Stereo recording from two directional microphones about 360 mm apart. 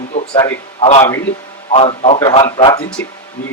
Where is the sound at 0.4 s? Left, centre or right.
Centre.